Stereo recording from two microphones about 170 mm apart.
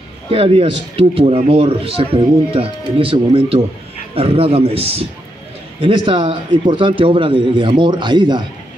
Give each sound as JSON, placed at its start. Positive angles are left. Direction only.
{"t": 0.3, "sound": "a man's voice", "side_deg": -35}